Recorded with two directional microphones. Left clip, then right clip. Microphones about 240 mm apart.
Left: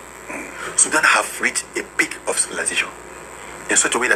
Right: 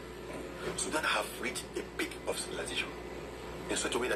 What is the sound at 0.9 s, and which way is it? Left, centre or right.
Speech, left.